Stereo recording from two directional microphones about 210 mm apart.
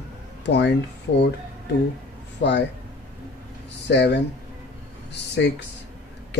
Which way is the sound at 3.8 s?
55° left (ahead or behind).